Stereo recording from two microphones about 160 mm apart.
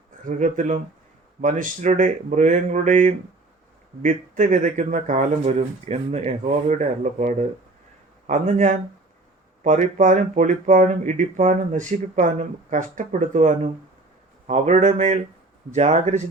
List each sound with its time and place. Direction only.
0.3 s speech: 50° right (ahead or behind)